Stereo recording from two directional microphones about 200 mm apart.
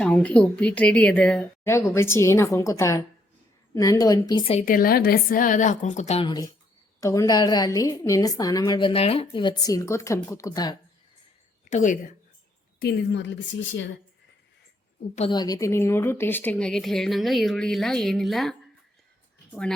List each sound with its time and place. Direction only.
0.0 s a woman's voice: 5° left (ahead or behind); by 4.6 s 25° left (ahead or behind)
4.6 s a woman's voice: 45° left (ahead or behind); by 10.8 s 20° left (ahead or behind)
11.7 s a woman's voice: 40° left (ahead or behind)
12.8 s speech: 55° left (ahead or behind)
15.3 s speech: 20° left (ahead or behind); by 18.5 s centre (ahead or behind)